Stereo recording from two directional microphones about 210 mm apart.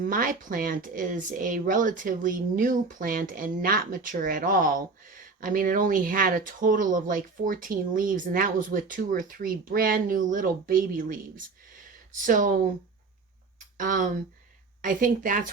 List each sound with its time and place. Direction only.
0.0 s speech: 40° right (ahead or behind)
13.7 s speech: 40° right (ahead or behind)